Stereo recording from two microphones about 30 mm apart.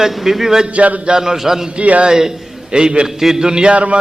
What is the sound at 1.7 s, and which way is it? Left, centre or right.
Speech, right.